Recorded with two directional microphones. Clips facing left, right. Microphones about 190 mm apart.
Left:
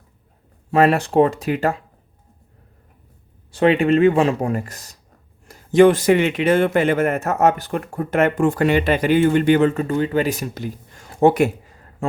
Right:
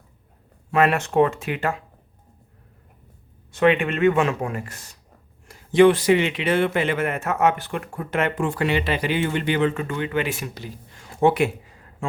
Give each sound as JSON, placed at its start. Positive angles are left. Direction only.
{"t": 0.7, "sound": "speech", "side_deg": 35}
{"t": 3.5, "sound": "a man's voice", "side_deg": 35}